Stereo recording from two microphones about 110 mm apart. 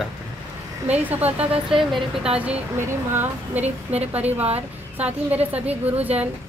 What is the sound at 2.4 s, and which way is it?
A woman's voice, 15° right (ahead or behind).